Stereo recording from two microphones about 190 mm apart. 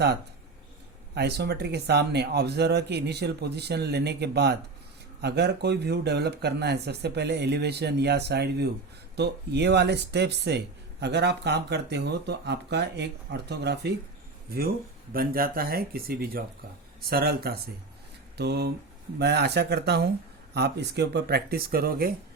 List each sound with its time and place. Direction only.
1.1 s speech: 60° right (ahead or behind)
15.1 s speech: 50° right (ahead or behind)